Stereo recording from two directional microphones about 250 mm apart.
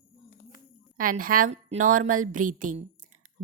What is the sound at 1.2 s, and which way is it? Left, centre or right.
A woman's voice, right.